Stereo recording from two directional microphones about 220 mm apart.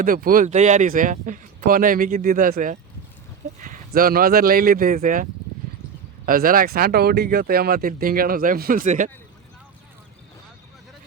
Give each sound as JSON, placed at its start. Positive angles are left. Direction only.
{"t": 0.0, "sound": "speech", "side_deg": -40}